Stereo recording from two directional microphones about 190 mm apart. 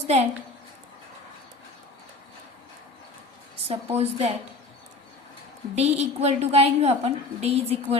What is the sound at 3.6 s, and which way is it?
Speech, 30° right (ahead or behind).